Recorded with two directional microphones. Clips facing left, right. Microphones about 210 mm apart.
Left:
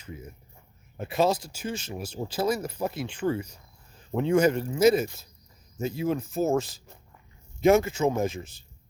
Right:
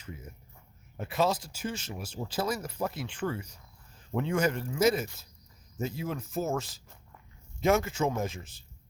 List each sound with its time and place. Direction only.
1.0 s speech: 15° left (ahead or behind)